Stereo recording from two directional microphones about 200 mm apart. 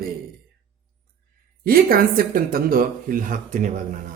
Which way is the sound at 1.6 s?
45° right (ahead or behind).